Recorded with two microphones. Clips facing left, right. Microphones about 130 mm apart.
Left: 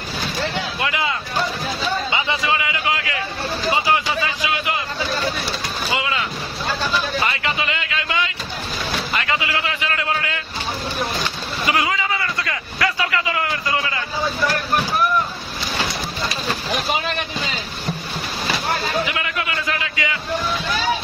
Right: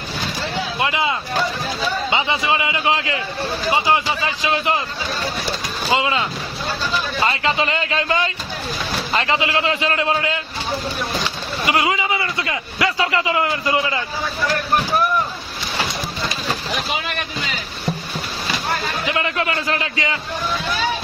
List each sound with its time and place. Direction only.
0.7 s a sound: 25° right (ahead or behind)
2.0 s a man's voice: 20° right (ahead or behind)
5.9 s a man's voice: 25° right (ahead or behind)
7.2 s a man's voice: 30° right (ahead or behind)
11.6 s a man's voice: 25° right (ahead or behind)
19.0 s a man's voice: 30° right (ahead or behind)